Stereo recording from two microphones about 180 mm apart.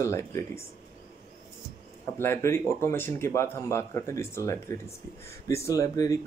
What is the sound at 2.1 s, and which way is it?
Speech, 15° left (ahead or behind).